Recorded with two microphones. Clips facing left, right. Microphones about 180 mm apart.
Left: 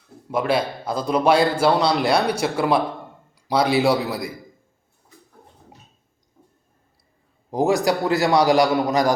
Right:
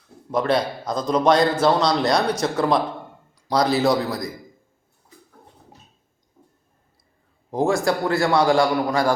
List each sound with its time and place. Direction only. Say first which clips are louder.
0.3 s a man's voice: right 1 dB; 5° left (ahead or behind)
7.5 s a man's voice: left 1 dB; 15° left (ahead or behind)